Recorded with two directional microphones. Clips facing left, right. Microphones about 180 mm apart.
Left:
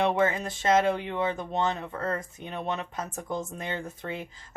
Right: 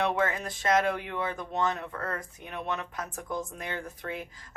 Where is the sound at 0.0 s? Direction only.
25° left (ahead or behind).